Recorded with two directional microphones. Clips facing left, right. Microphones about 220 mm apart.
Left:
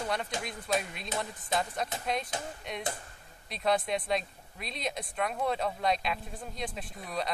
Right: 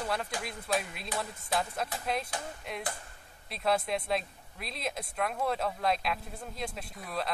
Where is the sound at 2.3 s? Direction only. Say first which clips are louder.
Left 1 dB; 20° left (ahead or behind).